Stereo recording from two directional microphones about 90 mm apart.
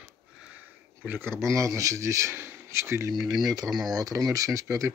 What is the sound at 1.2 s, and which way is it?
Speech, 30° right (ahead or behind).